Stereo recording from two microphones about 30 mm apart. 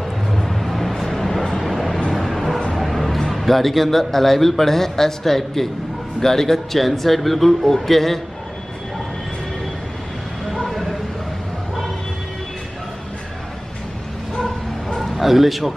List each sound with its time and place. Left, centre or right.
0.3 s vehicle: centre
2.1 s bow-wow: centre
2.8 s a man's voice: centre
10.6 s a sound: centre
14.3 s dog: left
15.0 s a man's voice: centre